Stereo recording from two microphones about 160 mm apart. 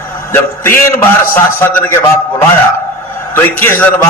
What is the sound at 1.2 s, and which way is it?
Speech, 60° left (ahead or behind).